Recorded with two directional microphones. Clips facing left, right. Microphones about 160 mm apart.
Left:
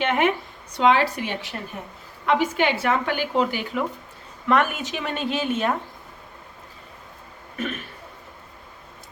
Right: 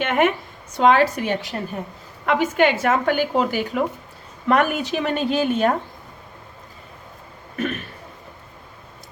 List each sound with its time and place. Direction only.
0.0 s a woman's voice: 50° right (ahead or behind)